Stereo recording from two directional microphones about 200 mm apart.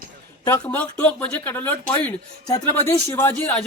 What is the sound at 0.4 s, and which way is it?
A man's voice, 10° left (ahead or behind).